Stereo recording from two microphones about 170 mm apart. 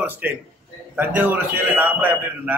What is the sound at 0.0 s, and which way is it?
A man's voice, 10° right (ahead or behind).